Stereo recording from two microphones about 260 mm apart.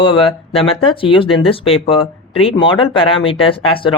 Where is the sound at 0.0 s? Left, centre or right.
Centre.